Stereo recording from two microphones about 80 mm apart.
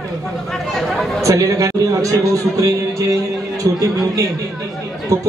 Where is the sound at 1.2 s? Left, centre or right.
Right.